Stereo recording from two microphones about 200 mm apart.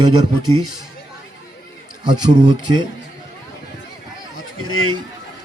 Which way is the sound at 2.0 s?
20° right (ahead or behind).